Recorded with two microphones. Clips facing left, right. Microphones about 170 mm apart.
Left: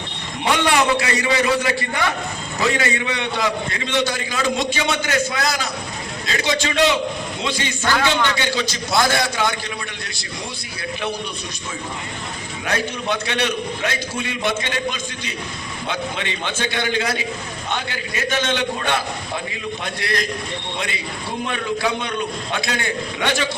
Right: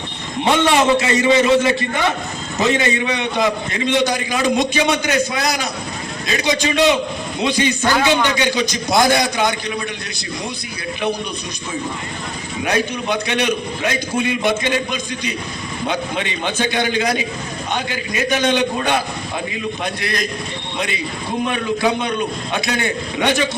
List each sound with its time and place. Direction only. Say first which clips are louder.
0.4 s a man's voice: right 3 dB; 20° right (ahead or behind)
12.6 s a man's voice: right 3 dB; 15° right (ahead or behind)
15.9 s a man's voice: right 3 dB; 15° right (ahead or behind)